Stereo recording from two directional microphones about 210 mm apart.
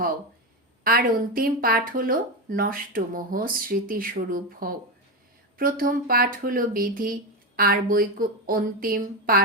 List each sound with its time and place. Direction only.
0.9 s speech: 45° right (ahead or behind)